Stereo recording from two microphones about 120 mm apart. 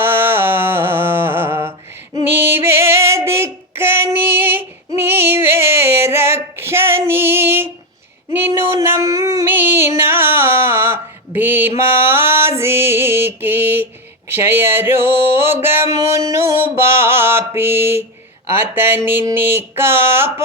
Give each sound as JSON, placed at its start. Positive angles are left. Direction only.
{"t": 0.0, "sound": "music", "side_deg": -20}
{"t": 2.3, "sound": "female singing", "side_deg": -20}
{"t": 8.3, "sound": "a sound", "side_deg": -20}
{"t": 11.3, "sound": "mantra", "side_deg": -15}
{"t": 14.3, "sound": "a sound", "side_deg": -20}
{"t": 18.5, "sound": "speech", "side_deg": -20}